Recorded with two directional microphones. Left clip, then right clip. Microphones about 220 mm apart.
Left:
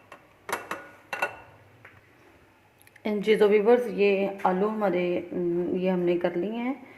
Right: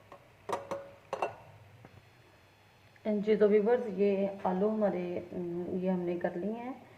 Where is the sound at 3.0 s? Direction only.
40° left (ahead or behind).